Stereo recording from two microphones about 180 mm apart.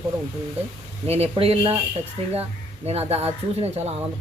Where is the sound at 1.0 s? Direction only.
35° right (ahead or behind).